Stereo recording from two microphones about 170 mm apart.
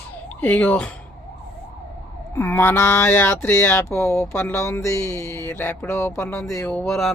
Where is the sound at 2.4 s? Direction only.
15° left (ahead or behind).